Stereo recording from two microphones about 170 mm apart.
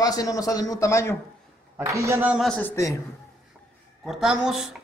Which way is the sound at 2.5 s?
15° left (ahead or behind).